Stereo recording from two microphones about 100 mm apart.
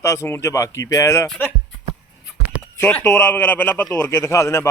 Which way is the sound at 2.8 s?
15° left (ahead or behind).